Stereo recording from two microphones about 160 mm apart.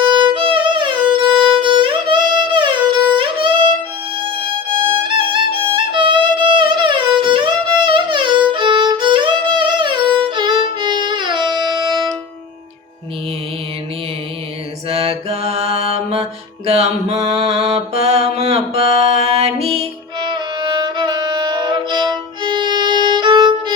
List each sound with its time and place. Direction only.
0.0 s music: 30° right (ahead or behind)
4.8 s violin: 30° right (ahead or behind)
5.9 s music: 30° right (ahead or behind)
14.8 s mantra: 35° right (ahead or behind)